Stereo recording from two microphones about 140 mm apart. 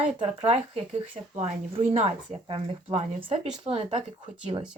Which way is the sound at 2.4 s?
45° right (ahead or behind).